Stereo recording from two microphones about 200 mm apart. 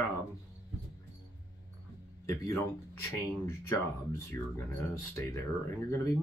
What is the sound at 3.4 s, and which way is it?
Speech, 15° left (ahead or behind).